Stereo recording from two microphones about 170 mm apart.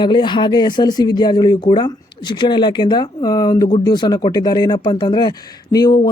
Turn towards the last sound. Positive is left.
turn(degrees=25)  # may be behind; listen again after turning